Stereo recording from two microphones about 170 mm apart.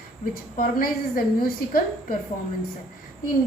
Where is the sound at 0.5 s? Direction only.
55° left (ahead or behind).